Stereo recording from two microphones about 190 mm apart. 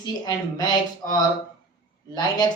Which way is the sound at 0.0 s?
20° left (ahead or behind).